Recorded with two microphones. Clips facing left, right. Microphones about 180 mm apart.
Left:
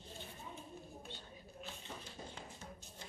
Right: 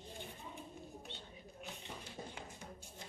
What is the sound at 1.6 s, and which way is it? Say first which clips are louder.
Tap: right 1 dB; 15° right (ahead or behind).